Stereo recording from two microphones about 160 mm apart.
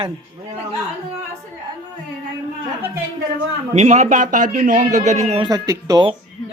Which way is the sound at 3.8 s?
45° right (ahead or behind).